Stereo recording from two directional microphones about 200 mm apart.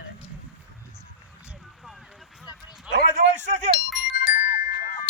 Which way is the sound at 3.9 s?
5° right (ahead or behind).